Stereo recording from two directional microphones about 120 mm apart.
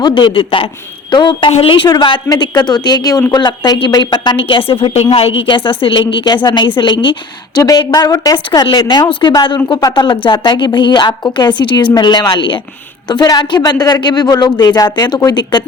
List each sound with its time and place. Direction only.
0.0 s a woman's voice: 40° left (ahead or behind)
7.6 s speech: 30° left (ahead or behind)